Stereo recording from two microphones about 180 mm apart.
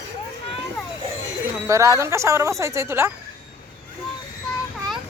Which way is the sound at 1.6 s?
15° right (ahead or behind).